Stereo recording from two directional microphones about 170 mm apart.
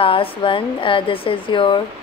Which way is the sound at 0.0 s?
30° left (ahead or behind).